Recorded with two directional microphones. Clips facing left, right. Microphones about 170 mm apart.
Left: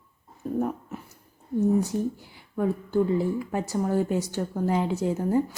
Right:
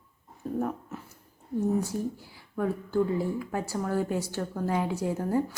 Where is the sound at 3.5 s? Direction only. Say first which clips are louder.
Left 4 dB; 20° left (ahead or behind).